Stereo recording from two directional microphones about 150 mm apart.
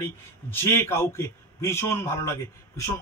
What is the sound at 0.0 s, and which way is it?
A man's voice, 15° left (ahead or behind).